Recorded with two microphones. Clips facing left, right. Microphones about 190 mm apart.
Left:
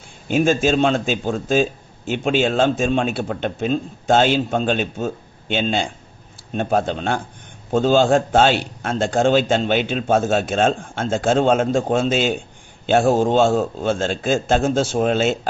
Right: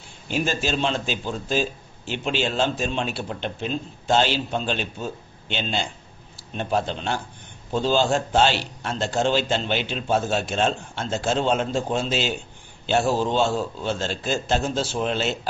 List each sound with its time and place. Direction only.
0.3 s a man's voice: 50° left (ahead or behind)